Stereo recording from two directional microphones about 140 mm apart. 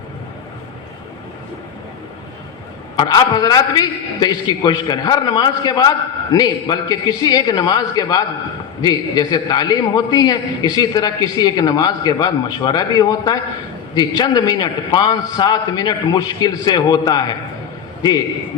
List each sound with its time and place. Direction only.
2.9 s a man's voice: 30° left (ahead or behind)